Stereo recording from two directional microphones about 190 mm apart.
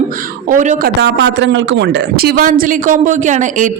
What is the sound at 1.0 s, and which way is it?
A man's voice, 75° right (ahead or behind).